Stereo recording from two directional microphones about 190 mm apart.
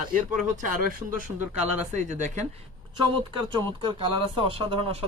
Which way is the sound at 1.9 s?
40° right (ahead or behind).